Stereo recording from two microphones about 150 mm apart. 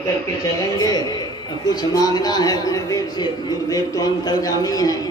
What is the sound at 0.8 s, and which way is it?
A man's voice, 25° left (ahead or behind).